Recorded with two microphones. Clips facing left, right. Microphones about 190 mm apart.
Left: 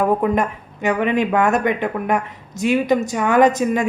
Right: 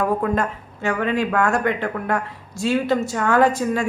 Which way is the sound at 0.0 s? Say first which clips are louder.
Left 3 dB; 20° left (ahead or behind).